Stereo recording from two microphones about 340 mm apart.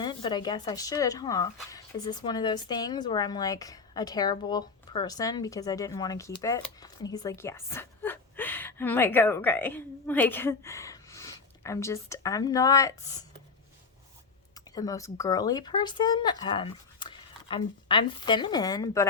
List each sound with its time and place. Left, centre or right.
0.0 s speech: centre
14.5 s speech: centre